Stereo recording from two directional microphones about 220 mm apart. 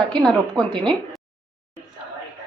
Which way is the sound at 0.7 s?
20° right (ahead or behind).